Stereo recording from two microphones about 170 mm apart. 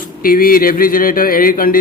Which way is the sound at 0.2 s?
55° left (ahead or behind).